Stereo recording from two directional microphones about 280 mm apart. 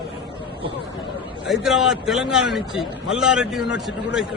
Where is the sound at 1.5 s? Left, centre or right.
Centre.